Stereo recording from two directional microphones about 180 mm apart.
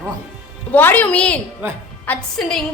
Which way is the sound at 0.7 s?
10° left (ahead or behind).